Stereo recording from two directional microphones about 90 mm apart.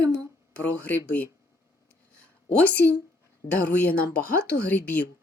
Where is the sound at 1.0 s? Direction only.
15° left (ahead or behind).